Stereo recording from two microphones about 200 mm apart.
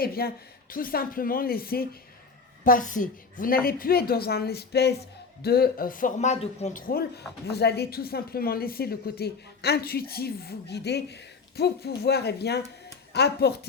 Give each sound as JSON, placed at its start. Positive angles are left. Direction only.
{"t": 0.0, "sound": "a woman's voice", "side_deg": 50}